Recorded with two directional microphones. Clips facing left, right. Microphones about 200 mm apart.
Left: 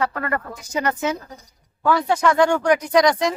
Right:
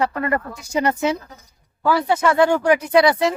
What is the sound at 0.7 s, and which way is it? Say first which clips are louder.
Speech: right 3 dB; 30° right (ahead or behind).